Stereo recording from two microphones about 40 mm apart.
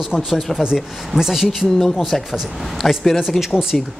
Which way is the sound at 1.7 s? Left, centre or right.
Centre.